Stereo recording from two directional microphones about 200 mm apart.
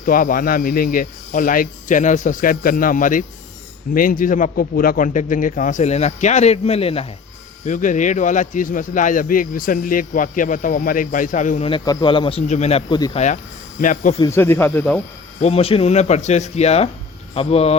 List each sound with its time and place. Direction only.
0.0 s speech: 45° left (ahead or behind)
7.6 s speech: 40° left (ahead or behind)
11.7 s speech: 20° left (ahead or behind); by 14.2 s 40° left (ahead or behind)
14.2 s speech: 15° left (ahead or behind)
15.4 s speech: 30° left (ahead or behind)